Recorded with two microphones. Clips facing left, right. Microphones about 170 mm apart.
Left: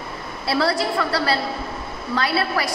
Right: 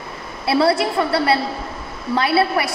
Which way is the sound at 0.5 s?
25° right (ahead or behind).